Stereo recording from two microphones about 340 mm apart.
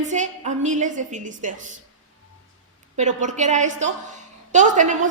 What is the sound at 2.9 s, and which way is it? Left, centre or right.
A woman's voice, right.